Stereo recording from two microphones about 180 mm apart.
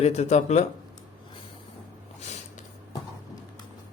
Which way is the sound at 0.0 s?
35° left (ahead or behind).